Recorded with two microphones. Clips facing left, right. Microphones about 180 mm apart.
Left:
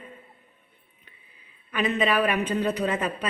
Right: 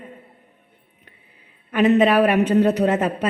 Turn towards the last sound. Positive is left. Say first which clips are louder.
# right 7 dB
turn(degrees=-70)  # may be behind; listen again after turning